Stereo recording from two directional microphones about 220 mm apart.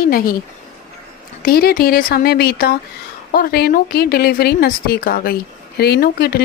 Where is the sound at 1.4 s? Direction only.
40° left (ahead or behind).